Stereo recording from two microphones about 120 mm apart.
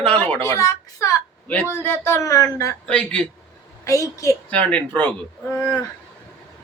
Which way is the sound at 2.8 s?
10° left (ahead or behind).